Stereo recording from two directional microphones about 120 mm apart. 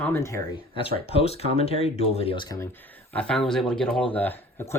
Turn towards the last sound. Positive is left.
turn(degrees=15)  # may be behind; listen again after turning